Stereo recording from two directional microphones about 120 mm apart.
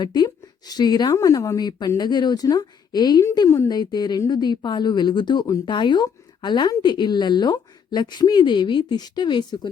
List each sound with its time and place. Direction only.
0.0 s speech: 35° left (ahead or behind)